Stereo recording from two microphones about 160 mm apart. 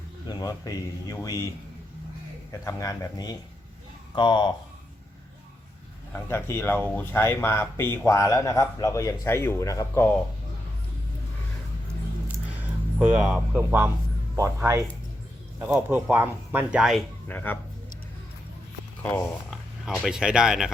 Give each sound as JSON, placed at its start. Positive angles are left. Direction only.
{"t": 0.3, "sound": "speech", "side_deg": 25}
{"t": 2.6, "sound": "speech", "side_deg": 20}
{"t": 6.1, "sound": "speech", "side_deg": 15}
{"t": 13.0, "sound": "speech", "side_deg": -10}
{"t": 17.2, "sound": "speech", "side_deg": 10}
{"t": 19.0, "sound": "speech", "side_deg": 15}
{"t": 19.5, "sound": "speech", "side_deg": 0}